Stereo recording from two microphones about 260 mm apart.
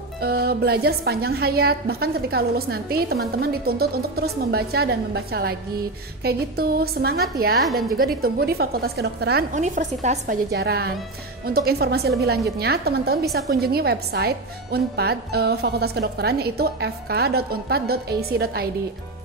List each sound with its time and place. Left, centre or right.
0.2 s a woman's voice: right